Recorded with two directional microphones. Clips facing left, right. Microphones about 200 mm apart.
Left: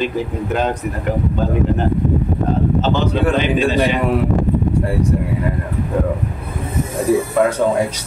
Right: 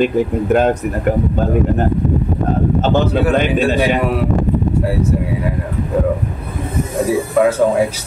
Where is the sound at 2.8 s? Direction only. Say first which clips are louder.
Right 3 dB; 50° right (ahead or behind).